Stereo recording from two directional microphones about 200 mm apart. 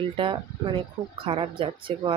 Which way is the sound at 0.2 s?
25° right (ahead or behind).